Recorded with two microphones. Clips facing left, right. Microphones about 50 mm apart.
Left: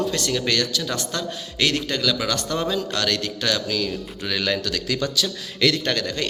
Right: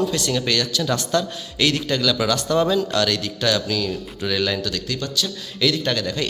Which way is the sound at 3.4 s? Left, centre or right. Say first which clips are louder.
Right 3 dB; left.